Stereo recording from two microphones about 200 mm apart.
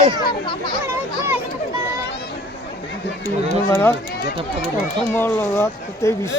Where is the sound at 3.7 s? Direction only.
10° left (ahead or behind).